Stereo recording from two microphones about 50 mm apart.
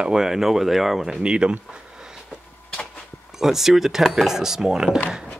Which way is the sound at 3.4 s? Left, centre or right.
Centre.